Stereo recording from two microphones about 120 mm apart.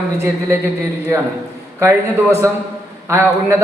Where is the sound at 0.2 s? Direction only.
20° right (ahead or behind).